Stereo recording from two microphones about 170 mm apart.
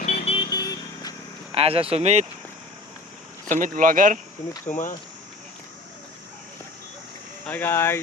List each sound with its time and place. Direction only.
0.0 s vehicle: 40° left (ahead or behind); by 1.1 s 20° left (ahead or behind)
1.5 s speech: 35° right (ahead or behind)
3.5 s speech: 50° right (ahead or behind)
4.6 s speech: 50° left (ahead or behind)
7.4 s speech: 10° left (ahead or behind)